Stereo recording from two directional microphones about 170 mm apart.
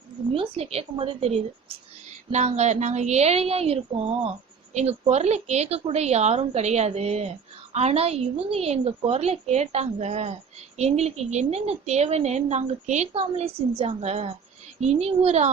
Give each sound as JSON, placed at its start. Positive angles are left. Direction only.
{"t": 0.3, "sound": "a woman's voice", "side_deg": -35}